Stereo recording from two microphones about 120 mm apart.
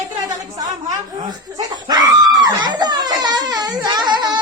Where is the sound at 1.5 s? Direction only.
35° right (ahead or behind).